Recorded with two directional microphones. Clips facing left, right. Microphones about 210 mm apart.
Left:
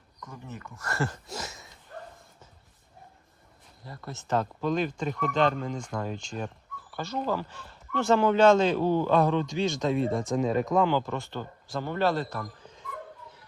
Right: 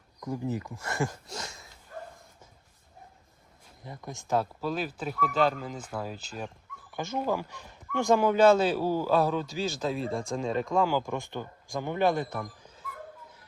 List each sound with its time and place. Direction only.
0.6 s speech: 15° right (ahead or behind)
1.4 s a sound: 5° left (ahead or behind)
3.8 s speech: 15° right (ahead or behind)